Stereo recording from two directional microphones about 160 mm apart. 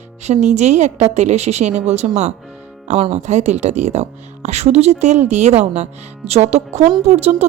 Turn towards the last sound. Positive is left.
turn(degrees=-40)  # may be behind; listen again after turning